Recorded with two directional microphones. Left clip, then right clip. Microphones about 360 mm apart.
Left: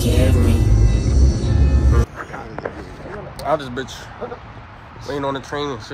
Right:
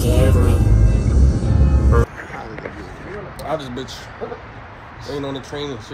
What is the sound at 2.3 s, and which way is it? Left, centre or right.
Walk, centre.